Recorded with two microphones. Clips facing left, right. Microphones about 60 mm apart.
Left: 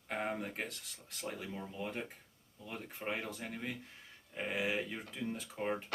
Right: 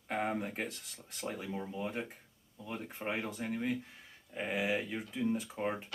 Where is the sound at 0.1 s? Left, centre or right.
Centre.